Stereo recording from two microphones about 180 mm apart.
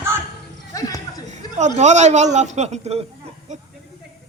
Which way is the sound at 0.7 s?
20° left (ahead or behind).